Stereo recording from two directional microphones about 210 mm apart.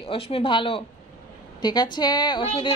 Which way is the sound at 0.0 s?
25° left (ahead or behind).